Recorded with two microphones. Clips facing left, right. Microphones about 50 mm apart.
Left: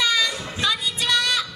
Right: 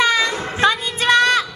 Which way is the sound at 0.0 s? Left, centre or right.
Right.